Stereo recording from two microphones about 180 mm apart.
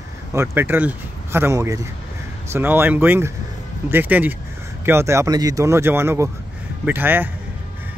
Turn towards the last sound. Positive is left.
turn(degrees=-10)  # may be behind; listen again after turning